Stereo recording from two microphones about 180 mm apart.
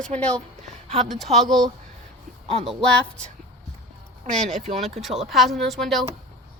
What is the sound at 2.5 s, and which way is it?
Speech, 35° right (ahead or behind).